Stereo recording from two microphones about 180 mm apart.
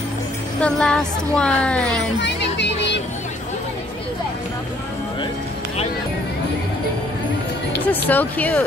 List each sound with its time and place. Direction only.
0.6 s speech: 5° left (ahead or behind)
2.2 s music: 75° left (ahead or behind)
7.8 s speech: 10° left (ahead or behind)